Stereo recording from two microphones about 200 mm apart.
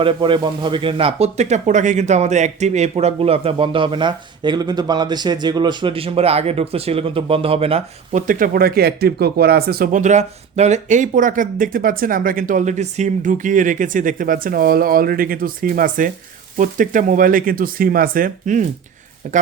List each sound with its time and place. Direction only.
0.0 s speech: 25° right (ahead or behind)